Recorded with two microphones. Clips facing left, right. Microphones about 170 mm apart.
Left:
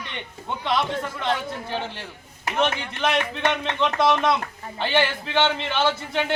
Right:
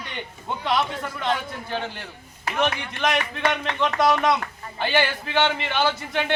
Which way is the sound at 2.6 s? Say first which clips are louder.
Even; centre (ahead or behind).